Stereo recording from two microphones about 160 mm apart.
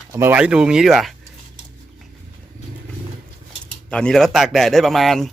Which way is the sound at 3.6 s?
5° left (ahead or behind).